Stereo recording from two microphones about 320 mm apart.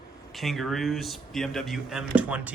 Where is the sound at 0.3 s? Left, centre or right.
Centre.